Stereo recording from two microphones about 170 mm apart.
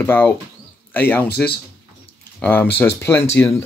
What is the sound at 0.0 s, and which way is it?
Speech, 15° left (ahead or behind).